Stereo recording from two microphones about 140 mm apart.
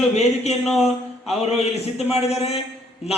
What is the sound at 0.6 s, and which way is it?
Speech, centre (ahead or behind).